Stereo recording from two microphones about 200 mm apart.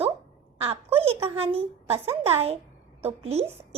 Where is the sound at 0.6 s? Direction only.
30° right (ahead or behind).